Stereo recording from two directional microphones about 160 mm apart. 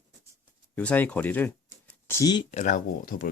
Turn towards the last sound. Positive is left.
turn(degrees=60)  # may be behind; listen again after turning